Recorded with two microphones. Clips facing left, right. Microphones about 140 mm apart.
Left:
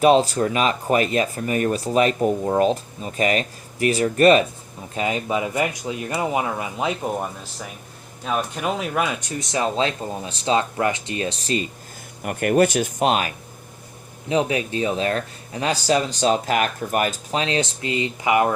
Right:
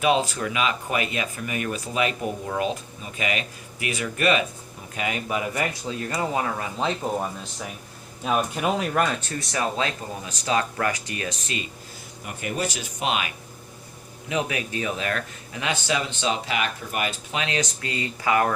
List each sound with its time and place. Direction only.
0.0 s speech: 35° left (ahead or behind)
12.2 s speech: 60° left (ahead or behind); by 13.3 s 40° left (ahead or behind)
14.3 s speech: 30° left (ahead or behind)